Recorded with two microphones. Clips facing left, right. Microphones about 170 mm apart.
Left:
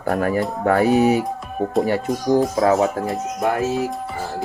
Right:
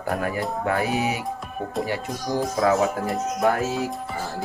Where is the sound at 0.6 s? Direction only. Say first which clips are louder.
Left 9 dB; 40° left (ahead or behind).